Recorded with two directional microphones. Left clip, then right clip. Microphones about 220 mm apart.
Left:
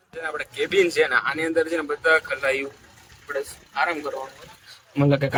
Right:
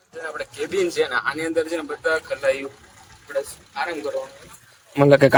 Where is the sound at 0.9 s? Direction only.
25° left (ahead or behind).